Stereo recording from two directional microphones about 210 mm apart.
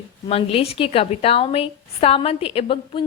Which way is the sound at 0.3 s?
25° left (ahead or behind).